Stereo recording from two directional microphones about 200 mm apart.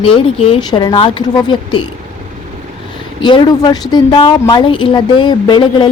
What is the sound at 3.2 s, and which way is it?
Speech, 20° left (ahead or behind).